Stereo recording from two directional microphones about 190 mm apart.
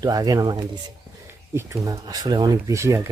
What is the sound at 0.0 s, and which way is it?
Speech, 20° right (ahead or behind).